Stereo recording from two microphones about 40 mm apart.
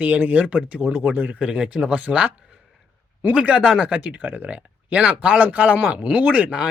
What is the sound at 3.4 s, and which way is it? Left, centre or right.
Speech, centre.